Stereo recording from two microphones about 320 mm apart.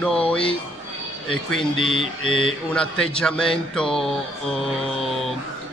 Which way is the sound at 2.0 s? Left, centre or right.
Right.